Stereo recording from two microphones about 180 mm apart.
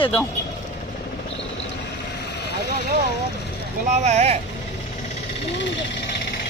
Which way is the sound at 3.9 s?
40° right (ahead or behind).